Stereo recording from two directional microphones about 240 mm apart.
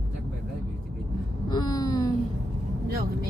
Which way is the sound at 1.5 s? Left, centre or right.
Centre.